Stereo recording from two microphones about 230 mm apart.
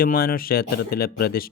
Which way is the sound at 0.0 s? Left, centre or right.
Left.